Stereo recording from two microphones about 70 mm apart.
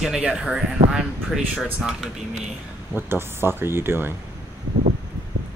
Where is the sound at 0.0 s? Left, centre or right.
Centre.